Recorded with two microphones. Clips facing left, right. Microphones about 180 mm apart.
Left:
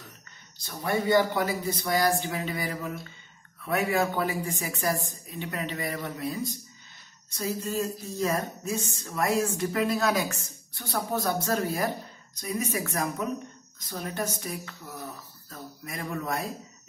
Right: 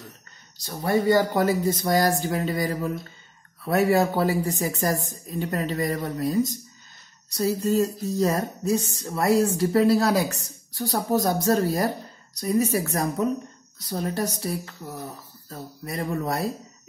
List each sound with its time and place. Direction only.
0.6 s speech: 40° right (ahead or behind)